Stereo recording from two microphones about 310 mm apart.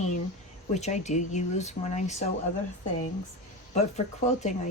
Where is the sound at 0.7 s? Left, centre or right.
Left.